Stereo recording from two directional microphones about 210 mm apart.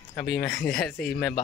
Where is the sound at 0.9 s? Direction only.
45° left (ahead or behind).